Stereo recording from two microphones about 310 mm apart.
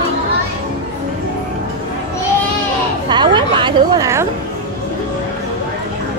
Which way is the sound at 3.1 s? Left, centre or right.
Centre.